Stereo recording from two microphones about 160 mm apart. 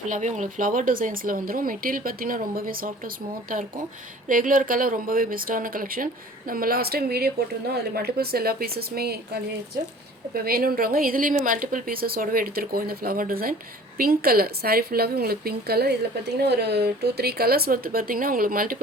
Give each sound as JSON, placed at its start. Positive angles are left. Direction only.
{"t": 0.1, "sound": "speech", "side_deg": -50}
{"t": 4.3, "sound": "speech", "side_deg": -55}
{"t": 10.3, "sound": "speech", "side_deg": -70}
{"t": 16.5, "sound": "speech", "side_deg": -90}